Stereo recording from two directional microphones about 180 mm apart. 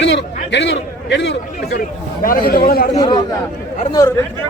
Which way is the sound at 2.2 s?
55° left (ahead or behind).